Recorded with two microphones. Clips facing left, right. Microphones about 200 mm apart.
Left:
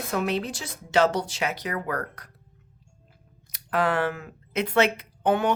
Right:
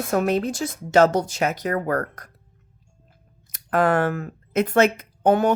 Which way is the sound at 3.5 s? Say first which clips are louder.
Right 5 dB; 50° right (ahead or behind).